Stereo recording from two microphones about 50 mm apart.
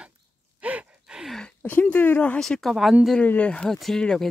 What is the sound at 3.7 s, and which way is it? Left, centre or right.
Speech, centre.